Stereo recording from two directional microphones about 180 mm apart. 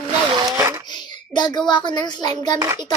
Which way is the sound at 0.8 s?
25° left (ahead or behind).